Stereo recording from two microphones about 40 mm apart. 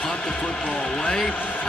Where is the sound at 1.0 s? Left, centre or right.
Left.